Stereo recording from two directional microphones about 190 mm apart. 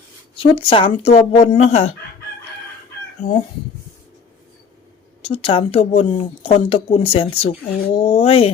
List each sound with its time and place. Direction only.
0.5 s speech: 30° left (ahead or behind)
5.2 s speech: 30° left (ahead or behind)